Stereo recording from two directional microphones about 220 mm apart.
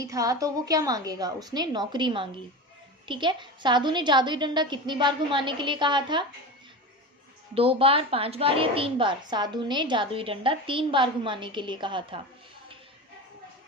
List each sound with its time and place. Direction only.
0.0 s a woman's voice: 15° right (ahead or behind)
7.5 s a woman's voice: 25° right (ahead or behind)